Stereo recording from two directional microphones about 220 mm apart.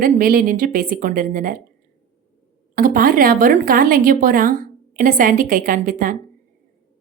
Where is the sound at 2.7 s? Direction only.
40° right (ahead or behind).